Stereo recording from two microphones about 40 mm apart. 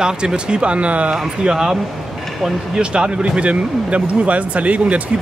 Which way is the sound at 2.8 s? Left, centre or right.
Right.